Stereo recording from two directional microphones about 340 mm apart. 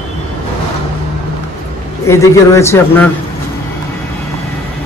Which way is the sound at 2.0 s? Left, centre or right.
Centre.